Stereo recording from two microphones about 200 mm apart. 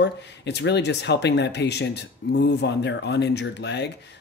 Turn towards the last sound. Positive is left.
turn(degrees=60)  # may be behind; listen again after turning